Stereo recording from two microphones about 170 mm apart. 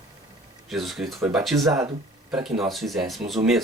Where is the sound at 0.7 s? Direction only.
Centre (ahead or behind).